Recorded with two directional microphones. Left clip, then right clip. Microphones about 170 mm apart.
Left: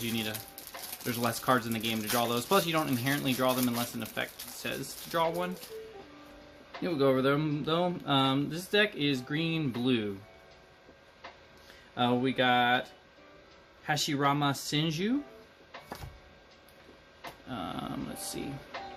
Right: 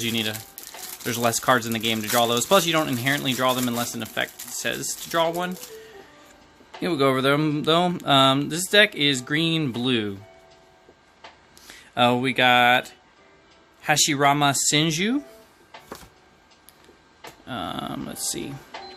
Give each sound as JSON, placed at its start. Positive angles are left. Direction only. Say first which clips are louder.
{"t": 0.0, "sound": "speech", "louder": "right 9 dB", "side_deg": -35}
{"t": 6.8, "sound": "speech", "louder": "right 6 dB", "side_deg": -40}
{"t": 11.7, "sound": "speech", "louder": "right 9 dB", "side_deg": -40}
{"t": 13.8, "sound": "speech", "louder": "right 10 dB", "side_deg": -40}
{"t": 17.5, "sound": "speech", "louder": "right 8 dB", "side_deg": -35}